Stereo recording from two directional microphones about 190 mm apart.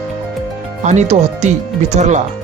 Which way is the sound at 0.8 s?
35° right (ahead or behind).